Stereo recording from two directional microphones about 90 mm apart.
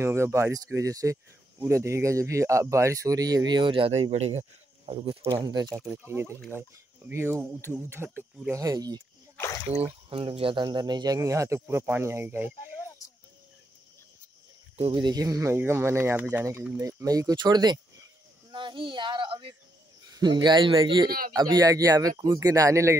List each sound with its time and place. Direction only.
0.0 s speech: 30° right (ahead or behind); by 4.4 s 85° right
4.8 s speech: 70° right (ahead or behind)
5.3 s speech: 45° right (ahead or behind)
5.9 s speech: 30° right (ahead or behind)
8.5 s speech: 40° right (ahead or behind)
9.8 s speech: 90° right; by 11.1 s 50° right (ahead or behind)
11.1 s speech: 35° right (ahead or behind)
14.9 s speech: 50° right (ahead or behind)
18.5 s a child's voice: 65° right (ahead or behind)
20.1 s speech: 50° right (ahead or behind)
21.3 s speech: 45° right (ahead or behind)